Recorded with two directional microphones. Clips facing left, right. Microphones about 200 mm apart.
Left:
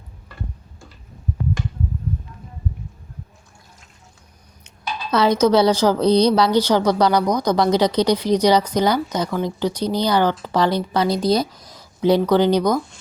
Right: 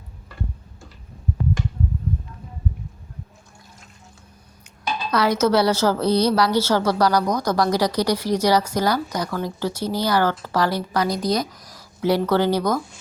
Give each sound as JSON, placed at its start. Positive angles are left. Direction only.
{"t": 5.1, "sound": "a woman's voice", "side_deg": 20}